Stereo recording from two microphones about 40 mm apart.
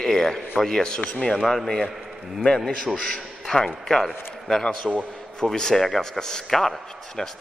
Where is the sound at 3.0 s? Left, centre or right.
Centre.